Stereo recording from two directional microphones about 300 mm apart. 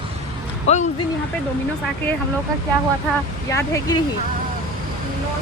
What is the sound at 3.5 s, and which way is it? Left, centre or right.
Speech, centre.